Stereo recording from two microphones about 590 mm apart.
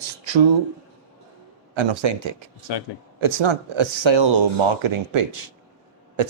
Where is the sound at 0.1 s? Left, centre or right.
Right.